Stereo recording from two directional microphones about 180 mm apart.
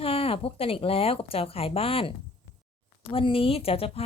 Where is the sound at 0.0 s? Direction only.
30° left (ahead or behind).